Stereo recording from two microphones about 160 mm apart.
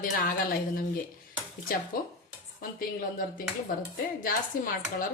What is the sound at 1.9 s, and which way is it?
Speech, 65° left (ahead or behind).